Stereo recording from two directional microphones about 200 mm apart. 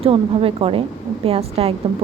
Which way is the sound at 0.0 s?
30° right (ahead or behind).